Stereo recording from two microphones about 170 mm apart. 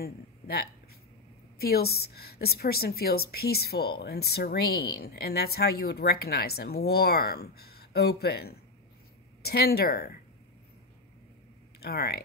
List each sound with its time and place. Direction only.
0.0 s a woman's voice: 65° left (ahead or behind)
11.8 s speech: 65° left (ahead or behind)